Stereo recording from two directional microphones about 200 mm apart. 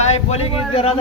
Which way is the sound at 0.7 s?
30° left (ahead or behind).